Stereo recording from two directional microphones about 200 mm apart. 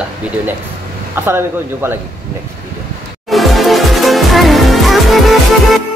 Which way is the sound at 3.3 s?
Centre (ahead or behind).